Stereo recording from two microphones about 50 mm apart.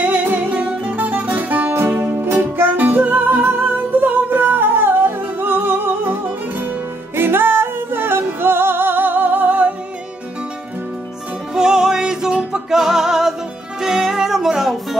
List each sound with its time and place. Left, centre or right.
0.0 s music: right
0.5 s music: right
1.7 s music: right
7.2 s music: right
11.5 s music: centre
12.6 s music: centre